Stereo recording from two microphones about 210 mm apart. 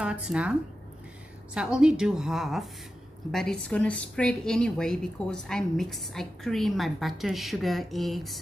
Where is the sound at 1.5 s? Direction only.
5° right (ahead or behind).